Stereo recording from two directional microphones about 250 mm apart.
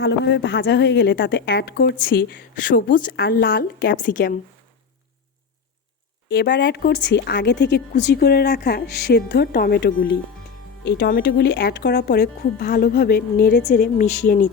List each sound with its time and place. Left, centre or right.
0.0 s a woman's voice: left
6.2 s a woman's voice: left